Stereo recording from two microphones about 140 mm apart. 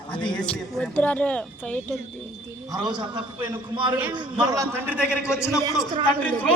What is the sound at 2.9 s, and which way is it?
A man's voice, 35° right (ahead or behind).